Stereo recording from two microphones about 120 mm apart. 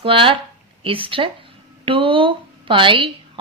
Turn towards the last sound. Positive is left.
turn(degrees=-45)  # may be behind; listen again after turning